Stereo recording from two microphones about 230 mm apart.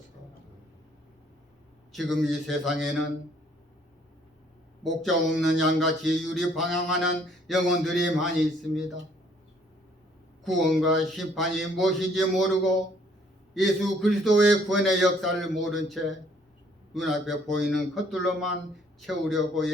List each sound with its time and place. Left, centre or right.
1.9 s speech: centre
4.8 s speech: centre
10.4 s speech: centre
13.5 s speech: centre